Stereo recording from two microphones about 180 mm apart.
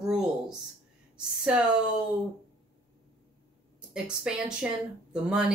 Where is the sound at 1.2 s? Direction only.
5° right (ahead or behind).